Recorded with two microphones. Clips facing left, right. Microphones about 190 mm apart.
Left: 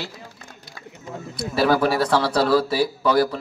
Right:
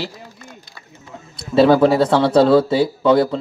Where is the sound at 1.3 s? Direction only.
25° right (ahead or behind).